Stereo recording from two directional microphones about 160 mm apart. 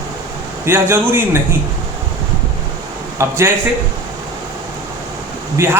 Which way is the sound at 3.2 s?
20° right (ahead or behind).